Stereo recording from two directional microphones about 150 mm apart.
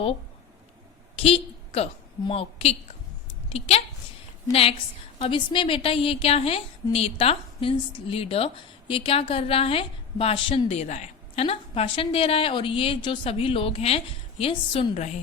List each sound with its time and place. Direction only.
1.2 s a woman's voice: 40° left (ahead or behind)
5.2 s a woman's voice: 35° left (ahead or behind)